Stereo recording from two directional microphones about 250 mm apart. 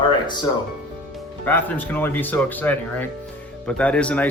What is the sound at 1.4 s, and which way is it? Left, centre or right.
A man's voice, centre.